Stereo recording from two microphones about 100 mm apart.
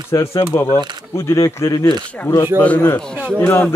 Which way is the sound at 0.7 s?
45° right (ahead or behind).